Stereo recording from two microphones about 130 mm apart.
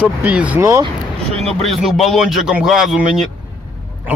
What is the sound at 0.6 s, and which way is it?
Speech, 25° right (ahead or behind).